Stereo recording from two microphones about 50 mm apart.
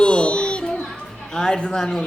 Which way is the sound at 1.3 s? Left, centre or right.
Centre.